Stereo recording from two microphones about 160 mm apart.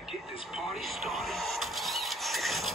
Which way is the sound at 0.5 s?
Centre (ahead or behind).